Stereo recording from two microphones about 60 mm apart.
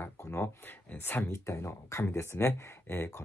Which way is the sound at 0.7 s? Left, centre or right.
Left.